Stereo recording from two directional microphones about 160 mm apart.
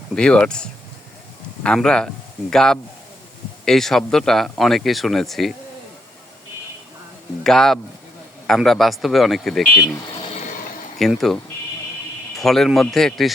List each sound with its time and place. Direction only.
0.2 s speech: 5° left (ahead or behind)
7.4 s speech: centre (ahead or behind)
10.3 s a sound: 55° left (ahead or behind)
10.9 s speech: centre (ahead or behind)
12.4 s speech: centre (ahead or behind)